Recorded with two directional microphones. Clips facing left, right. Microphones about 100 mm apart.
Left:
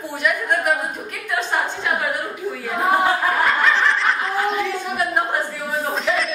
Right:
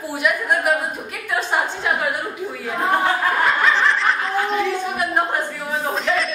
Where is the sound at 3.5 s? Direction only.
Centre (ahead or behind).